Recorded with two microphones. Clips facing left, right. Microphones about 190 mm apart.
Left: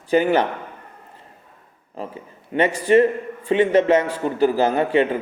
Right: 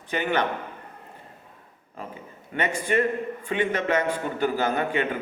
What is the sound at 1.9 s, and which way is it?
A man's voice, 35° left (ahead or behind).